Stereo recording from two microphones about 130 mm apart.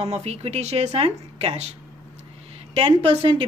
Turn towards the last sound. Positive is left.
turn(degrees=-45)  # may be behind; listen again after turning